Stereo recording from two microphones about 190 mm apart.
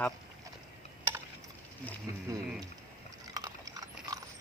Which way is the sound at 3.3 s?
20° right (ahead or behind).